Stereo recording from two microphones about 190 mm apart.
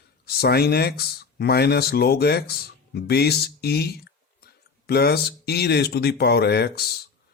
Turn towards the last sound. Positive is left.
turn(degrees=60)  # may be behind; listen again after turning